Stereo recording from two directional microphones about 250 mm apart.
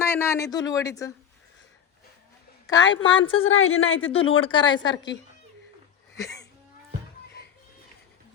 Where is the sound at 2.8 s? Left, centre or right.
Left.